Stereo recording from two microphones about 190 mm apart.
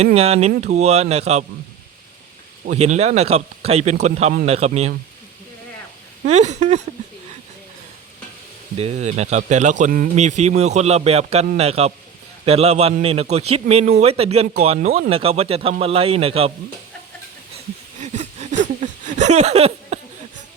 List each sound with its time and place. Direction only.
0.0 s speech: 35° right (ahead or behind)
2.6 s speech: 35° right (ahead or behind)
6.2 s speech: 35° right (ahead or behind)
8.8 s speech: 35° right (ahead or behind)
18.0 s a sound: 40° right (ahead or behind)